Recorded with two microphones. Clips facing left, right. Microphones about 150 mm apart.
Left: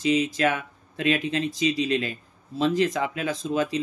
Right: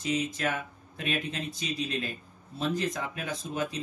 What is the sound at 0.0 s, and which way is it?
Speech, 90° left.